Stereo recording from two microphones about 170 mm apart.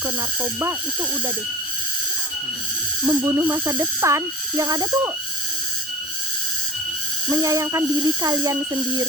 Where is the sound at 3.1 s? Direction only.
20° right (ahead or behind).